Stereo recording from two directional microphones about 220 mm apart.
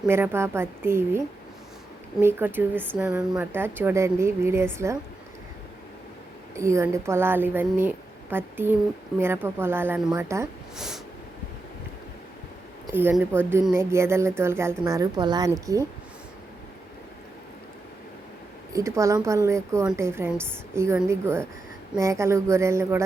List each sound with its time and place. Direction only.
0.1 s speech: 10° right (ahead or behind)
2.2 s speech: 10° right (ahead or behind)
6.6 s speech: 15° right (ahead or behind)
10.8 s a sound: centre (ahead or behind)
12.9 s speech: 10° right (ahead or behind)
18.7 s speech: 15° right (ahead or behind)